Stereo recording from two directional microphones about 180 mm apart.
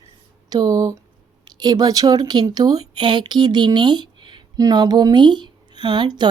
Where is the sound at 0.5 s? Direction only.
20° right (ahead or behind).